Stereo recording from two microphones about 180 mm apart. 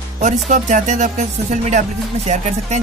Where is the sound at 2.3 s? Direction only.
40° right (ahead or behind).